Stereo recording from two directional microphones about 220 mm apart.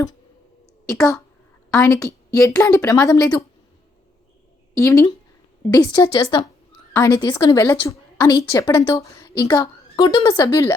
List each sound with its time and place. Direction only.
1.8 s a woman's voice: 15° left (ahead or behind)
4.8 s a woman's voice: 15° left (ahead or behind)